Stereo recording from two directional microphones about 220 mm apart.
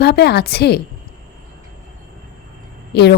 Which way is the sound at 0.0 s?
50° left (ahead or behind).